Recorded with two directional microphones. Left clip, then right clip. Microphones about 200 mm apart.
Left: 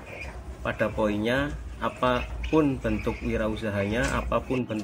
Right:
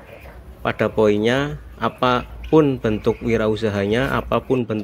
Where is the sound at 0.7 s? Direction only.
45° right (ahead or behind).